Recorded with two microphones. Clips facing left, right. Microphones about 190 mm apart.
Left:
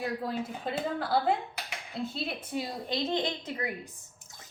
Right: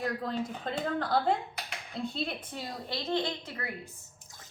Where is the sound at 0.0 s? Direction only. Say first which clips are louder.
Even; 10° left (ahead or behind).